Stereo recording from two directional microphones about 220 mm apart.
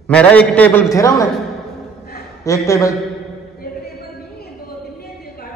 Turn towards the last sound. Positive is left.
turn(degrees=45)  # may be behind; listen again after turning